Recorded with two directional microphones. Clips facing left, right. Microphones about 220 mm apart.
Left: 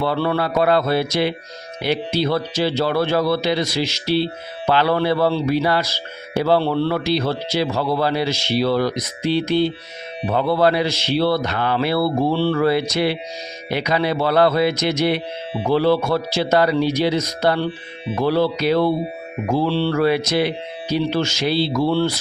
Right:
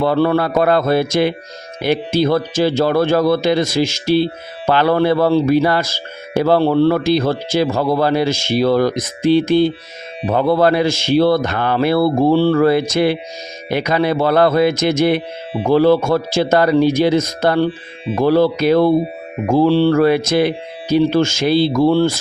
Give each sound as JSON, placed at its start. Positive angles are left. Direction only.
{"t": 0.0, "sound": "speech", "side_deg": -45}